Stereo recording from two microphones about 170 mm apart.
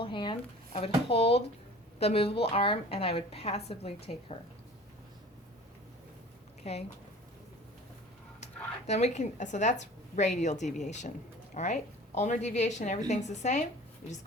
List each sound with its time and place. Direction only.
0.0 s a woman's voice: 30° left (ahead or behind)
6.6 s speech: 40° left (ahead or behind)
8.9 s a woman's voice: 40° left (ahead or behind)